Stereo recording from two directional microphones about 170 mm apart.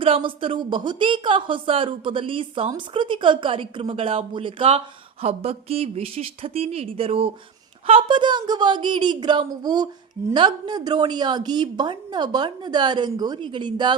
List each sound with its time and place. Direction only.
0.0 s a woman's voice: 30° right (ahead or behind)